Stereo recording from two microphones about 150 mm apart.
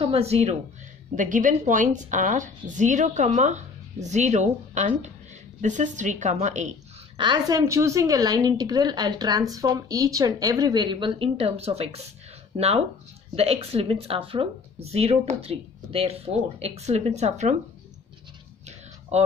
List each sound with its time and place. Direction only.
0.0 s a woman's voice: 40° right (ahead or behind)
1.1 s a woman's voice: 60° right (ahead or behind)
7.2 s a woman's voice: 30° right (ahead or behind); by 17.6 s 50° right (ahead or behind)
19.1 s a woman's voice: 50° right (ahead or behind)